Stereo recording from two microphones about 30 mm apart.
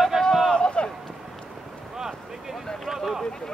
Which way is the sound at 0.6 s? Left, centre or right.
Left.